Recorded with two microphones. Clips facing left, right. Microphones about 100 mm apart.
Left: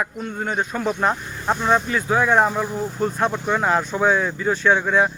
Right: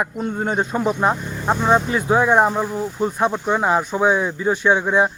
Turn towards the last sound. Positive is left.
turn(degrees=-20)  # may be behind; listen again after turning